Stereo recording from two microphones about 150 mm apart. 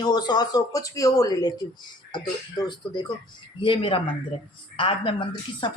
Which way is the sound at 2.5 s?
30° left (ahead or behind).